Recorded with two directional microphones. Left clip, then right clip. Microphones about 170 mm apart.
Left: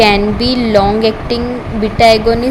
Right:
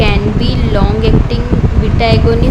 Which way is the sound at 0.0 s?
25° left (ahead or behind).